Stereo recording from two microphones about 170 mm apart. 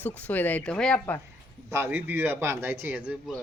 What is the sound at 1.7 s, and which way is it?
A man's voice, 15° right (ahead or behind).